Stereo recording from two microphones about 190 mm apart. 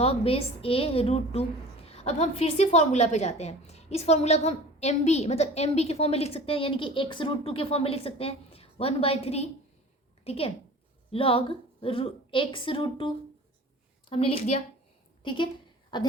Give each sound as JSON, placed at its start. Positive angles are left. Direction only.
{"t": 0.0, "sound": "a woman's voice", "side_deg": 30}